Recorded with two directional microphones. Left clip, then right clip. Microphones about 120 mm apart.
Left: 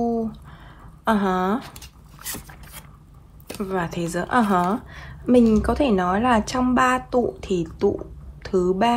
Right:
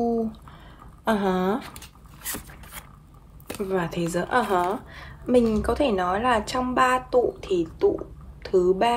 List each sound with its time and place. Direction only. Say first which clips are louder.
0.0 s a sound: left 1 dB; 35° left (ahead or behind)
1.0 s speech: left 2 dB; 35° left (ahead or behind)
1.6 s zipper: left 1 dB; centre (ahead or behind)
3.6 s speech: even; 35° left (ahead or behind)
4.6 s a woman's voice: left 2 dB; 5° left (ahead or behind)
5.4 s a woman's voice: left 3 dB; 5° right (ahead or behind); by 8.9 s 25° left (ahead or behind)